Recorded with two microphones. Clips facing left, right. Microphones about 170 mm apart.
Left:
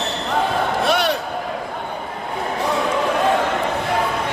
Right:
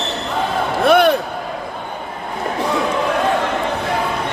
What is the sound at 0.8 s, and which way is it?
Slam, 55° right (ahead or behind).